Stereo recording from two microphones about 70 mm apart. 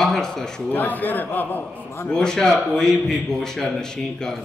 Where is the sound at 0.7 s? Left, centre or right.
Left.